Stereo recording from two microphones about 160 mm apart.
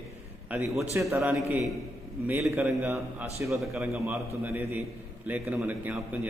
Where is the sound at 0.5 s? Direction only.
10° right (ahead or behind).